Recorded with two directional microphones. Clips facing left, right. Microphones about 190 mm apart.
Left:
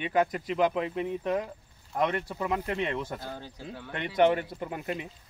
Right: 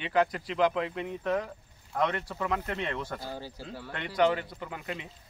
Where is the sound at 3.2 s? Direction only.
5° right (ahead or behind).